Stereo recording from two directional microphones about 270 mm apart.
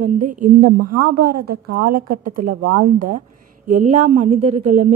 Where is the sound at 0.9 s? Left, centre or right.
Right.